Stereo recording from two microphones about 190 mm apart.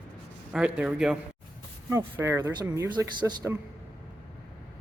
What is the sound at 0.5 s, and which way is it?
A man's voice, 5° right (ahead or behind).